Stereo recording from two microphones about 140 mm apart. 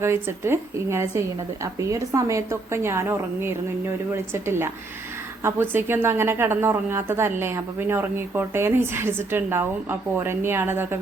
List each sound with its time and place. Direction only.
0.0 s a woman's voice: 20° right (ahead or behind)